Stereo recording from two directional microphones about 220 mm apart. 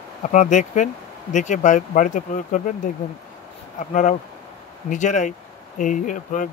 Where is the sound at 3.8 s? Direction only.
35° left (ahead or behind).